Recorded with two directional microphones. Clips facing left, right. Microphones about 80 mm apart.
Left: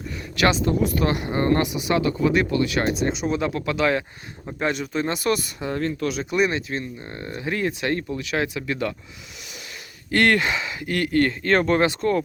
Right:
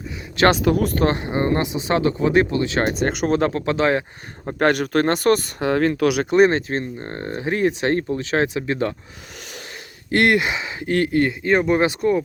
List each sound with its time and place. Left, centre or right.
0.6 s speech: right
0.9 s speech: right
1.3 s speech: right
2.8 s speech: right
3.5 s speech: right
4.6 s speech: right
5.5 s speech: right
6.3 s speech: right
10.1 s speech: right
11.2 s speech: centre